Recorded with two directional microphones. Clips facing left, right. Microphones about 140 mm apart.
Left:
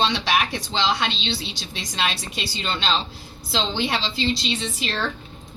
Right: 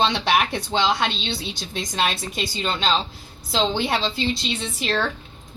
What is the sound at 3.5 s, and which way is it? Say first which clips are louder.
Speech: right 3 dB; 45° right (ahead or behind).